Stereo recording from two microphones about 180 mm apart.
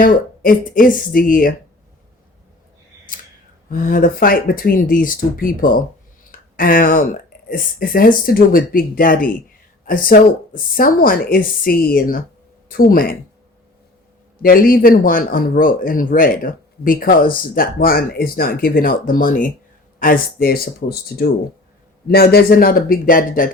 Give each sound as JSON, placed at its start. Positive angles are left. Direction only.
{"t": 0.0, "sound": "speech", "side_deg": 50}
{"t": 3.7, "sound": "speech", "side_deg": 50}
{"t": 14.4, "sound": "a man's voice", "side_deg": 55}